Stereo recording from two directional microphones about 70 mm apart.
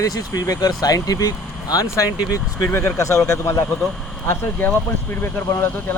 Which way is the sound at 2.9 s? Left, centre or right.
Left.